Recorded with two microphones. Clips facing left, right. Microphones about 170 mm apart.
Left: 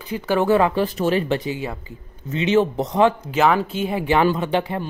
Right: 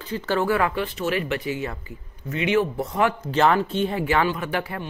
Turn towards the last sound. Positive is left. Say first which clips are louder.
# left 6 dB
turn(degrees=20)  # may be behind; listen again after turning